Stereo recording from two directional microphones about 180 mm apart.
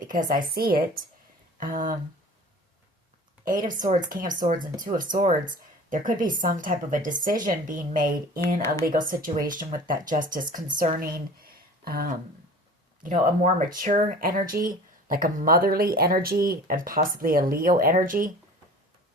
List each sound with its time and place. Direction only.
0.0 s a woman's voice: 50° right (ahead or behind)
3.7 s speech: 50° right (ahead or behind)
13.2 s speech: 50° right (ahead or behind)